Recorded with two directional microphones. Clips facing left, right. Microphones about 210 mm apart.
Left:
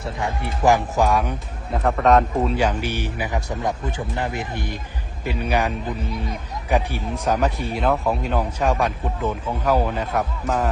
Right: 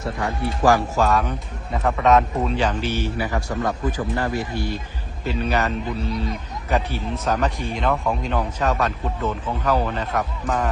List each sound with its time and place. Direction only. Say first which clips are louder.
0.2 s a man's voice: right 1 dB; 20° left (ahead or behind)
1.7 s a man's voice: left 1 dB; centre (ahead or behind)